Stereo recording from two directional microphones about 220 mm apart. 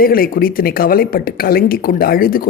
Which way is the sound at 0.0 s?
40° left (ahead or behind).